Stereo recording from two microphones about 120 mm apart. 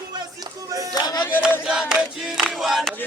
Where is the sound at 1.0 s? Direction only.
35° left (ahead or behind).